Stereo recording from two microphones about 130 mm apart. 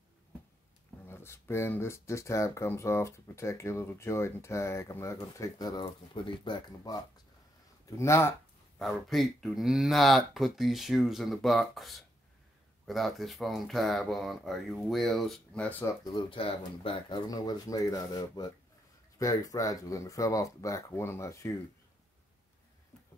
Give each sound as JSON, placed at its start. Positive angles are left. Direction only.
{"t": 1.0, "sound": "speech", "side_deg": 20}
{"t": 7.8, "sound": "speech", "side_deg": 25}
{"t": 8.7, "sound": "speech", "side_deg": 0}
{"t": 15.8, "sound": "speech", "side_deg": 25}
{"t": 17.3, "sound": "speech", "side_deg": 30}